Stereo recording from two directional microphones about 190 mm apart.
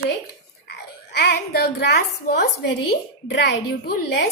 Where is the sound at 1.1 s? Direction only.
60° left (ahead or behind).